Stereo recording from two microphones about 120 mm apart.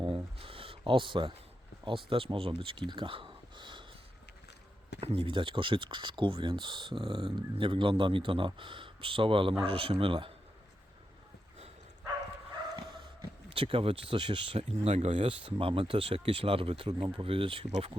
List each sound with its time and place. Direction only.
0.0 s a sound: 50° right (ahead or behind)
1.8 s speech: 45° right (ahead or behind)
4.9 s speech: 50° right (ahead or behind)
13.5 s speech: 50° right (ahead or behind)